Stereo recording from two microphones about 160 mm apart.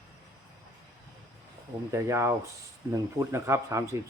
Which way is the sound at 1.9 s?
15° right (ahead or behind).